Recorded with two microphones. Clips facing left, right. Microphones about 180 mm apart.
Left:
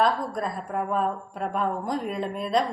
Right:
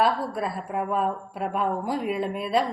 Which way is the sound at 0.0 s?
5° right (ahead or behind).